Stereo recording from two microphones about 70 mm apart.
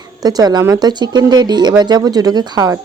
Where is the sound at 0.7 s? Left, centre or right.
Right.